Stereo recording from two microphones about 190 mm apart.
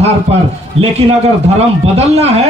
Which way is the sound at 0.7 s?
30° right (ahead or behind).